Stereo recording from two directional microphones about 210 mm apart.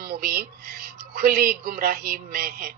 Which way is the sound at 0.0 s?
45° right (ahead or behind).